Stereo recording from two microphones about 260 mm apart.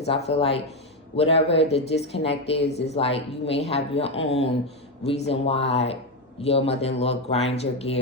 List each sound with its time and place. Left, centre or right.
0.0 s speech: left